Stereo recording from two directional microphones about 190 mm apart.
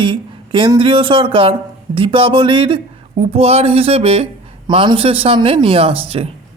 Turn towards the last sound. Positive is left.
turn(degrees=-30)  # may be behind; listen again after turning